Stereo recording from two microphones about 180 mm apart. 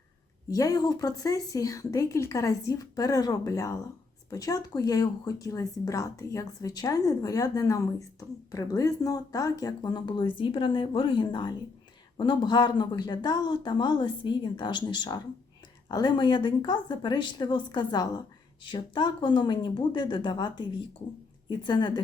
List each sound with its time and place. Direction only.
0.5 s speech: 20° left (ahead or behind)